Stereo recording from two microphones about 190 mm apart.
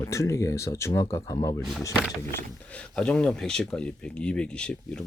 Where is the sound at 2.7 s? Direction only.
5° left (ahead or behind).